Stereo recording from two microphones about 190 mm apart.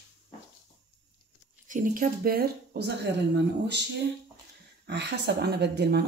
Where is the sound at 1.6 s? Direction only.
45° right (ahead or behind); by 3.8 s 60° right (ahead or behind).